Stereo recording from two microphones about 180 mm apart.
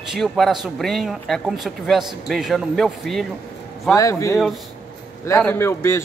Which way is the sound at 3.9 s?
15° left (ahead or behind).